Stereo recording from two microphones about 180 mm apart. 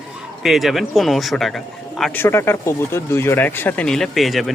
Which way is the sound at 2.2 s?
15° left (ahead or behind).